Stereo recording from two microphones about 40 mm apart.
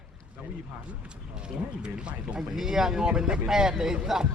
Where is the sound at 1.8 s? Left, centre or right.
Right.